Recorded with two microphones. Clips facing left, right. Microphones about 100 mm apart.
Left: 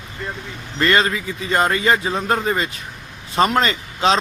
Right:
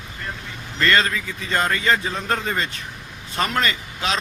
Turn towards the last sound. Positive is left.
turn(degrees=25)  # may be behind; listen again after turning